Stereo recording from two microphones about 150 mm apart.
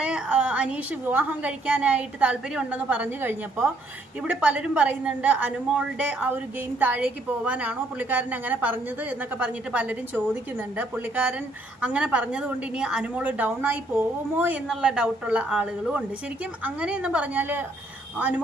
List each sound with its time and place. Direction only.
0.0 s a woman's voice: 10° right (ahead or behind)